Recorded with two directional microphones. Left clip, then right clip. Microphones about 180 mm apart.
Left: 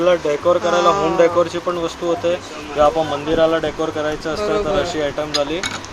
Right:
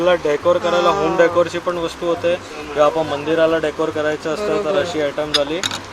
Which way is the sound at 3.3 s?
10° right (ahead or behind).